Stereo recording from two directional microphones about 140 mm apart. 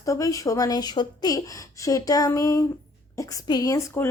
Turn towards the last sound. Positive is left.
turn(degrees=20)  # may be behind; listen again after turning